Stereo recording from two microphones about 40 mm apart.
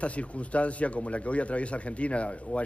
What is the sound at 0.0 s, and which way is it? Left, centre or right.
Speech, left.